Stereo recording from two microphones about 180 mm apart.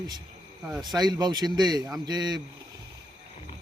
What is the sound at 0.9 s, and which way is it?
Speech, 20° right (ahead or behind).